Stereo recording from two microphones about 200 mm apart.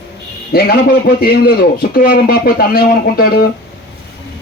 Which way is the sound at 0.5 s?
50° left (ahead or behind).